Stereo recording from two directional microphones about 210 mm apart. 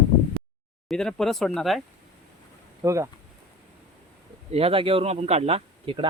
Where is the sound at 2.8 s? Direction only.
15° right (ahead or behind).